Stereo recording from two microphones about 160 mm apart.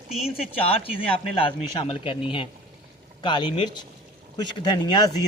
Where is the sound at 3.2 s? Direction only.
30° left (ahead or behind).